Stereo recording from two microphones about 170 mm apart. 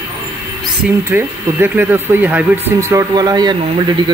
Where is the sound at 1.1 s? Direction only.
10° right (ahead or behind).